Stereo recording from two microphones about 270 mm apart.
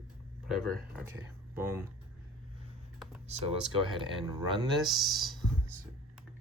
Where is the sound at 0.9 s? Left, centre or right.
Centre.